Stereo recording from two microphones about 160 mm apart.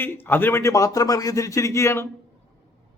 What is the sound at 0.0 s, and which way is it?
Speech, 15° left (ahead or behind).